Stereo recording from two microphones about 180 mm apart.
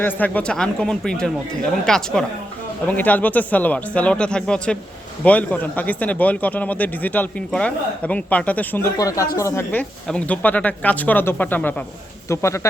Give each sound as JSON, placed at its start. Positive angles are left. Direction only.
{"t": 0.0, "sound": "speech", "side_deg": 10}